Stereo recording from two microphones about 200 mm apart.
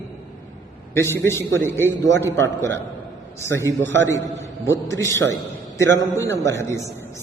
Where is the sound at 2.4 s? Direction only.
10° left (ahead or behind).